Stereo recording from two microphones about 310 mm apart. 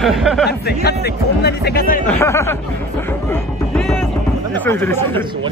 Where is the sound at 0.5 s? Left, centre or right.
Left.